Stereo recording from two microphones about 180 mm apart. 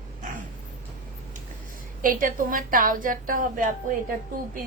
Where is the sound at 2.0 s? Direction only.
50° right (ahead or behind).